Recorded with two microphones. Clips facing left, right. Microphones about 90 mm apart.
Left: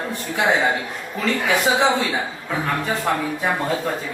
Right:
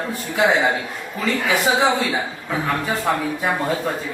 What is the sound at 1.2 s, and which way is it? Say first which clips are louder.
Speech: even; centre (ahead or behind).